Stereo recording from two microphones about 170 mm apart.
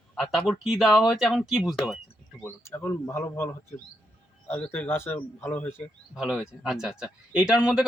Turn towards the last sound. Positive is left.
turn(degrees=-5)  # may be behind; listen again after turning